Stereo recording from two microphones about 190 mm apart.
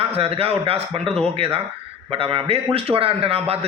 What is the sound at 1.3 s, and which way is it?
A man's voice, 30° right (ahead or behind).